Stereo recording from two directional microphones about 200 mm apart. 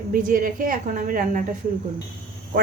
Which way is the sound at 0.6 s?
45° right (ahead or behind).